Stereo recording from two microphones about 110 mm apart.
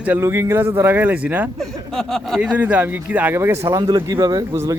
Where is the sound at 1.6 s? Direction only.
5° left (ahead or behind).